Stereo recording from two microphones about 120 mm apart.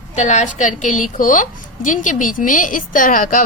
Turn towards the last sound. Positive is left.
turn(degrees=90)